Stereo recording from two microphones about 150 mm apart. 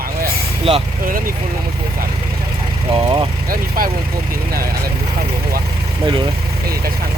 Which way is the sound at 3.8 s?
75° right (ahead or behind).